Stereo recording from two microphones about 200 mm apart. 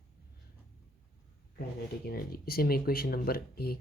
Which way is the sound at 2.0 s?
50° left (ahead or behind).